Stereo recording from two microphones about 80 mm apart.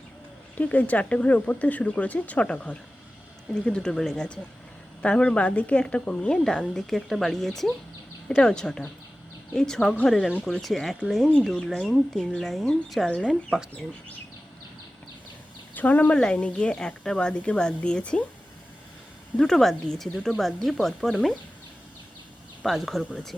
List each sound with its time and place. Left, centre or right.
0.5 s speech: centre
15.7 s speech: left
16.1 s speech: centre
19.4 s speech: centre
22.6 s speech: centre